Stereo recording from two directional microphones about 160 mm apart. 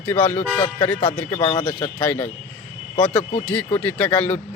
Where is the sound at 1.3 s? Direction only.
25° left (ahead or behind).